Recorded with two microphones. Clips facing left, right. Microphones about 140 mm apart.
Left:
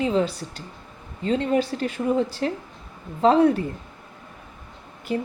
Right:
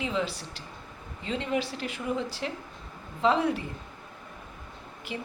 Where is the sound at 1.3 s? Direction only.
45° left (ahead or behind).